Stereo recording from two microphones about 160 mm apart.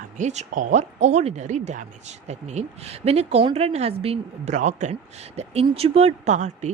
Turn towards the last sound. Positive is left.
turn(degrees=-45)  # may be behind; listen again after turning